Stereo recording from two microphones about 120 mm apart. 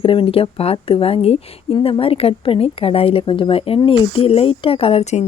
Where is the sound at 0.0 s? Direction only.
45° left (ahead or behind).